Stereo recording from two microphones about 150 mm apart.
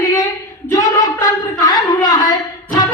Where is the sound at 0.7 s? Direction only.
25° left (ahead or behind).